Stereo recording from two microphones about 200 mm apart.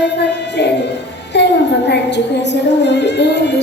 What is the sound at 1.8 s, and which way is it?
Music, 60° left (ahead or behind).